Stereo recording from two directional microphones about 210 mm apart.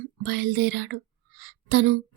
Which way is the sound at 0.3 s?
55° right (ahead or behind).